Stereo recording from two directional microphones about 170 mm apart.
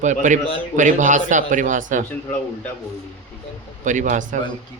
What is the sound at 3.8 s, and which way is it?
Speech, 45° right (ahead or behind).